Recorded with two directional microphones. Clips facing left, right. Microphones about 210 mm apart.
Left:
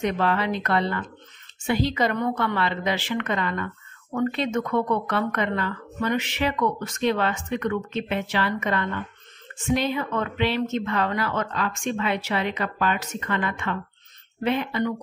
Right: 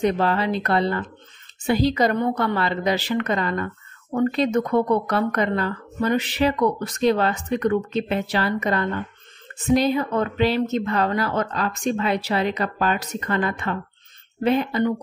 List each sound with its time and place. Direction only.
0.0 s a woman's voice: 35° right (ahead or behind)